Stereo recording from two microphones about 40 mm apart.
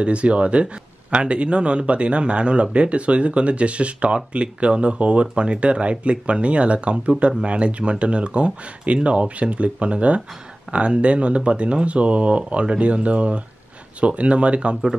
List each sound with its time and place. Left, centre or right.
0.0 s speech: right